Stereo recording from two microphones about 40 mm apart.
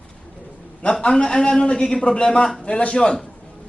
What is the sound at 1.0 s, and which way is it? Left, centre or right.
A man's voice, centre.